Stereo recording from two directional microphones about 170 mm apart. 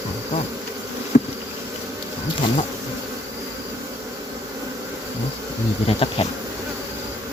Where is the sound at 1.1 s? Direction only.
45° left (ahead or behind).